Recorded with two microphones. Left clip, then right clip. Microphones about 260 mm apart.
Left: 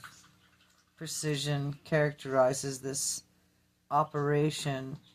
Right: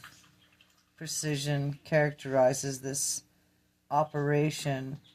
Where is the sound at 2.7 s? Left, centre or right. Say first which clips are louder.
Right 1 dB; right.